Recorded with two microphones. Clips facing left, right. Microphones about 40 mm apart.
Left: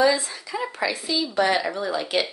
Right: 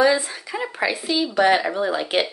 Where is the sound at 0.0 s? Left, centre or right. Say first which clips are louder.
Right 2 dB; right.